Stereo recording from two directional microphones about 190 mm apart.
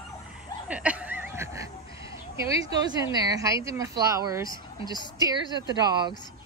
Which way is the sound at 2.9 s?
20° right (ahead or behind).